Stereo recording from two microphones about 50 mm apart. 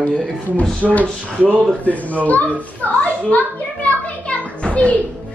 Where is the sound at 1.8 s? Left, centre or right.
Left.